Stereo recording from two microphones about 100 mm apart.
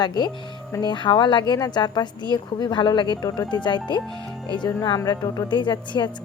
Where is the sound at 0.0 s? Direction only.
45° left (ahead or behind).